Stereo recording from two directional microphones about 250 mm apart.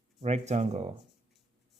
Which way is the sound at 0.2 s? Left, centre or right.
Right.